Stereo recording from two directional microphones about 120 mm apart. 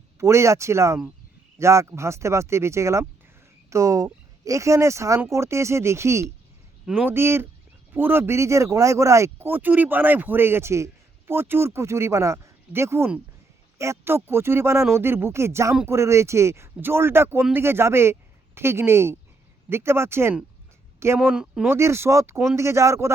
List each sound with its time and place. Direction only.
0.2 s speech: 25° right (ahead or behind)
21.2 s speech: 5° right (ahead or behind)
21.7 s speech: 20° right (ahead or behind)